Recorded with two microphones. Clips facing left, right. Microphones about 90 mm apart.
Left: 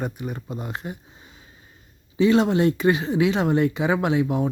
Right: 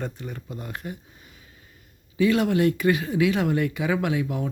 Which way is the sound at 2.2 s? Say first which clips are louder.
Left 2 dB; 25° left (ahead or behind).